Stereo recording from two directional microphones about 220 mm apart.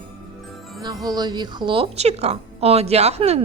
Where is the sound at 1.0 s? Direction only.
20° right (ahead or behind).